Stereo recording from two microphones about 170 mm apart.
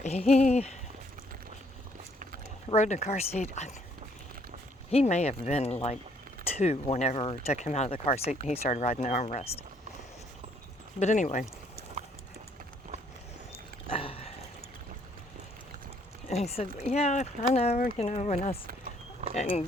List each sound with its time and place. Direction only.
0.0 s speech: 40° left (ahead or behind)
2.6 s speech: 45° left (ahead or behind)
4.9 s speech: 40° left (ahead or behind)
11.0 s speech: 45° left (ahead or behind)
13.9 s a sound: 35° left (ahead or behind)
16.3 s speech: 40° left (ahead or behind)